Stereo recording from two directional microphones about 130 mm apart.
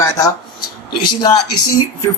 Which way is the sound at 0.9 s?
35° left (ahead or behind).